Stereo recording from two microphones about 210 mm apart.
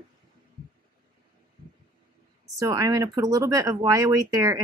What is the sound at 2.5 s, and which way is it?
Speech, 15° right (ahead or behind).